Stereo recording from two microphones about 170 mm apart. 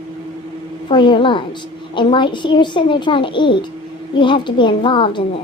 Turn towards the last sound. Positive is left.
turn(degrees=30)  # may be behind; listen again after turning